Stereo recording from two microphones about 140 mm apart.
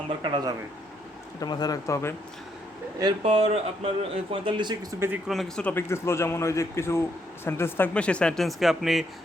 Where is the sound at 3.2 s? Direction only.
45° right (ahead or behind).